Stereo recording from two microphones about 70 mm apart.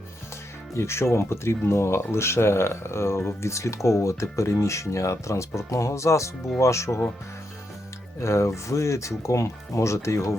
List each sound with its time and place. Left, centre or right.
0.7 s speech: left
8.2 s speech: left